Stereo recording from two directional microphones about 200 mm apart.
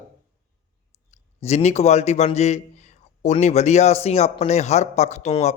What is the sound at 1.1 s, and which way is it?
A man's voice, 35° left (ahead or behind).